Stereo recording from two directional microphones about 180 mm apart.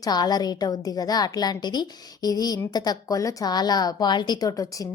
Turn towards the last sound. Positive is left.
turn(degrees=20)  # may be behind; listen again after turning